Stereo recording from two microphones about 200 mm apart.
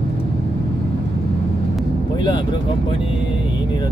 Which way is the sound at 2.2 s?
25° left (ahead or behind).